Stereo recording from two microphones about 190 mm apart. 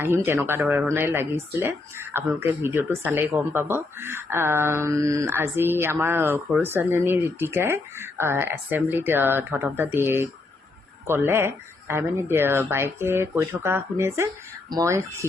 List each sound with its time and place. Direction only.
0.0 s speech: 10° right (ahead or behind)